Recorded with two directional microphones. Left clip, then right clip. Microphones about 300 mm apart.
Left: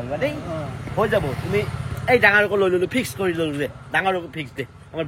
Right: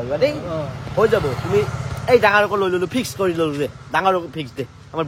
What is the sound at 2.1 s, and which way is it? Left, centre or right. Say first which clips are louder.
Speech: right 2 dB; centre.